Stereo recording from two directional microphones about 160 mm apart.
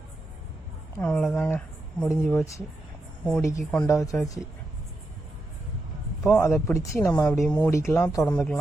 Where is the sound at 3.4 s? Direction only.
20° left (ahead or behind).